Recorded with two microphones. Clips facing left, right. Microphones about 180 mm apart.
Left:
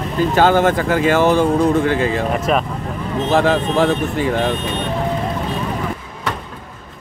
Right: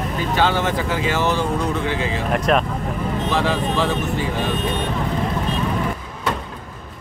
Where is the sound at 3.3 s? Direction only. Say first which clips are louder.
Left 7 dB; 50° left (ahead or behind).